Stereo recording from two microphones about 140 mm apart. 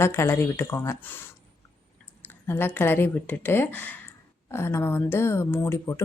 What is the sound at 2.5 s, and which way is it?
Speech, 15° left (ahead or behind).